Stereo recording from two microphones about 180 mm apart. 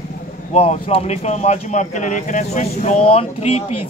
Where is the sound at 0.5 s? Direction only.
35° left (ahead or behind).